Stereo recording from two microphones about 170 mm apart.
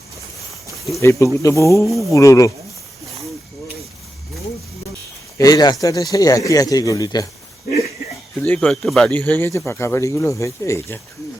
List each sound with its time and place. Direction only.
1.0 s speech: 15° left (ahead or behind)
1.9 s speech: centre (ahead or behind)
2.1 s speech: 20° left (ahead or behind)
5.4 s speech: 20° left (ahead or behind)
8.4 s speech: 10° left (ahead or behind)